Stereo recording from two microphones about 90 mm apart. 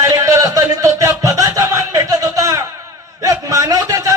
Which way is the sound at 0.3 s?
40° right (ahead or behind).